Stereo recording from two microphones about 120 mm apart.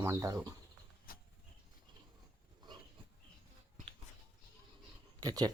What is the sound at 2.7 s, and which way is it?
Pig, 40° right (ahead or behind).